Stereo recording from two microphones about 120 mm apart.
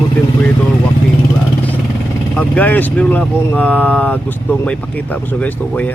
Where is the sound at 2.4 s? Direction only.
15° left (ahead or behind).